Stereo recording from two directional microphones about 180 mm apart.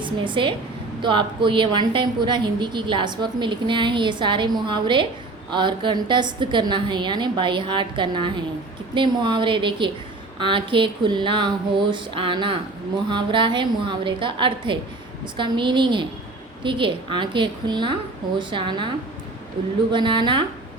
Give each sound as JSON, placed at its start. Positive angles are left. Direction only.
{"t": 0.0, "sound": "a woman's voice", "side_deg": -25}
{"t": 19.9, "sound": "a woman's voice", "side_deg": -25}